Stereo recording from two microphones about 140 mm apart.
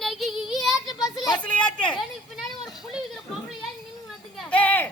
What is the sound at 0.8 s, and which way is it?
Speech, 30° left (ahead or behind).